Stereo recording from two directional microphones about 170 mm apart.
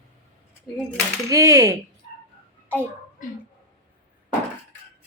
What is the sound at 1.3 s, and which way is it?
Speech, 20° right (ahead or behind).